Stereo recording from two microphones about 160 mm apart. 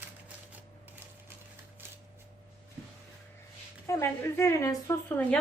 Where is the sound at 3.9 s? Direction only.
15° left (ahead or behind).